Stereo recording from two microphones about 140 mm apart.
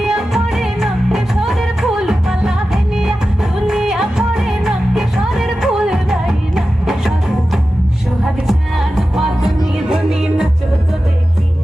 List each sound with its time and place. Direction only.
0.0 s music: 5° right (ahead or behind)